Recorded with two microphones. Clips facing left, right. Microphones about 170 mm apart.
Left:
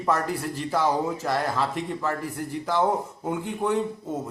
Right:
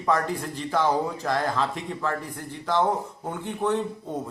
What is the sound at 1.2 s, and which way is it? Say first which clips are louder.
Speech: even; 5° left (ahead or behind).